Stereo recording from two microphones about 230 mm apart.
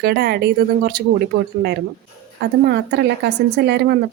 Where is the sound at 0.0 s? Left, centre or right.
Right.